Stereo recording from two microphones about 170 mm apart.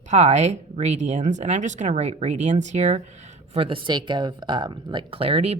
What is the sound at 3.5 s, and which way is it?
Speech, 30° right (ahead or behind).